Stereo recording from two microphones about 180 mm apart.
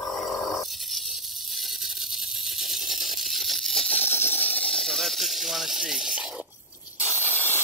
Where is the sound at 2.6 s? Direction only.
Centre (ahead or behind).